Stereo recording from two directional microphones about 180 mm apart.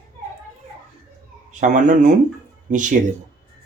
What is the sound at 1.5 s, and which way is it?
Speech, 45° right (ahead or behind).